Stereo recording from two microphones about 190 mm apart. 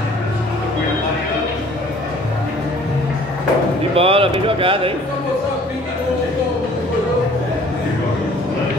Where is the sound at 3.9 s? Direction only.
30° right (ahead or behind).